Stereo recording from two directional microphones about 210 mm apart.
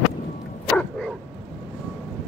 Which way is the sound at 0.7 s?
5° left (ahead or behind).